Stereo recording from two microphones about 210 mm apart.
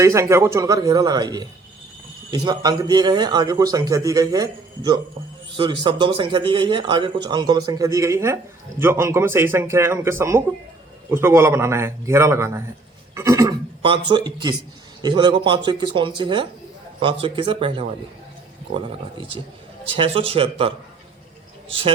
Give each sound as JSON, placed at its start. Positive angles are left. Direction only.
{"t": 0.0, "sound": "a man's voice", "side_deg": -15}
{"t": 13.1, "sound": "a sound", "side_deg": -15}
{"t": 14.1, "sound": "a man's voice", "side_deg": -20}